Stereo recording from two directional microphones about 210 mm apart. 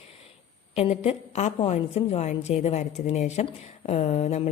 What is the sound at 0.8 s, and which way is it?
A woman's voice, 30° left (ahead or behind).